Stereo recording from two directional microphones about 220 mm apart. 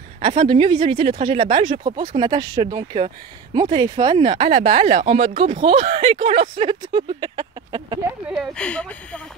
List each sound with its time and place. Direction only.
0.2 s speech: 25° right (ahead or behind)
8.3 s speech: 5° left (ahead or behind)